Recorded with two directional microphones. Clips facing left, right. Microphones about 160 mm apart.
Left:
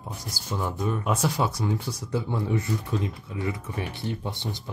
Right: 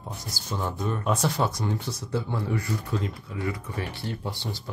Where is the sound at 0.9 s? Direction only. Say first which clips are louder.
Right 1 dB; 10° left (ahead or behind).